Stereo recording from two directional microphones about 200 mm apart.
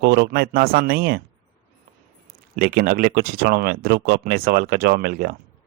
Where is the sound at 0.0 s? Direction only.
55° right (ahead or behind).